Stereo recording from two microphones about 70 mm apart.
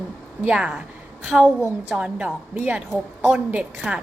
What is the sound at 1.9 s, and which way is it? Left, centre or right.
A woman's voice, centre.